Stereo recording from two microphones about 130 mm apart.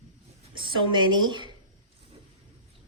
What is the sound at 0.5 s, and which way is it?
Speech, 35° right (ahead or behind).